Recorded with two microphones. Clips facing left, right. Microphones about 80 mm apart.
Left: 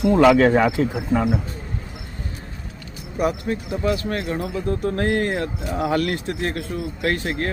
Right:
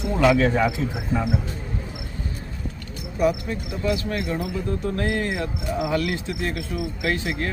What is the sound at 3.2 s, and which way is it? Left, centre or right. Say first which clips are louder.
Speech: even; left.